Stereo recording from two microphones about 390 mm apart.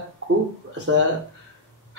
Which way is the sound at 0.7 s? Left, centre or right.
Right.